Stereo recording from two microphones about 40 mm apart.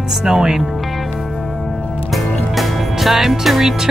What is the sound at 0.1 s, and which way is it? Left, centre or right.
Music, centre.